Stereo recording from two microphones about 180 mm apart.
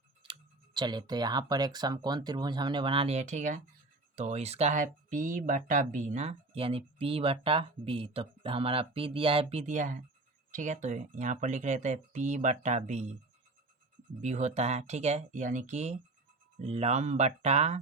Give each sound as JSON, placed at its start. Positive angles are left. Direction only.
{"t": 0.2, "sound": "speech", "side_deg": -25}
{"t": 14.2, "sound": "speech", "side_deg": -40}